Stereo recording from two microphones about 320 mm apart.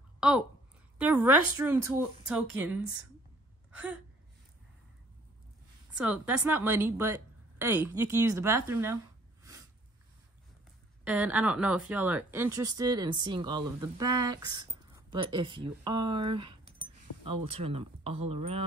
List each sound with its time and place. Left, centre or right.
0.2 s speech: centre
5.9 s speech: centre
11.1 s speech: centre